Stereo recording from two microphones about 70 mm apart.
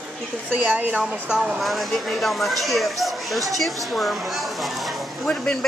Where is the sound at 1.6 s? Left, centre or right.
Centre.